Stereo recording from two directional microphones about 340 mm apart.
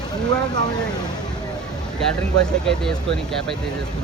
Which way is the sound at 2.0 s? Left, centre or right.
Centre.